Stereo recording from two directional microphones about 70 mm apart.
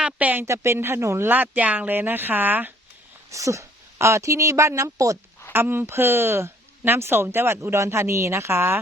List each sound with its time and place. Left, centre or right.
0.0 s a sound: right
0.4 s speech: right
1.3 s speech: right
3.2 s speech: right
5.5 s speech: right